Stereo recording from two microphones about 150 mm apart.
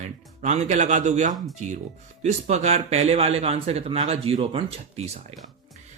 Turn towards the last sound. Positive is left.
turn(degrees=-45)  # may be behind; listen again after turning